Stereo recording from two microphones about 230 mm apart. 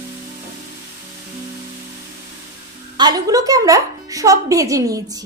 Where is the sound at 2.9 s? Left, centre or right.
Centre.